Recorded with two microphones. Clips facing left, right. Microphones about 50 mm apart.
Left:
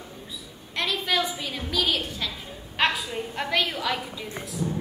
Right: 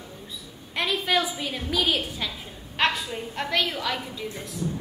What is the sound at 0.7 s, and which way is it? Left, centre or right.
A woman's voice, centre.